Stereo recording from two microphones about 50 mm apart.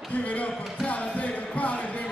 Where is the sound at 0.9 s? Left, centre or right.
Left.